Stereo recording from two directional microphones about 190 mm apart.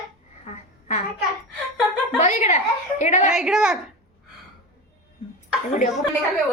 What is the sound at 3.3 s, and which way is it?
Speech, 5° right (ahead or behind).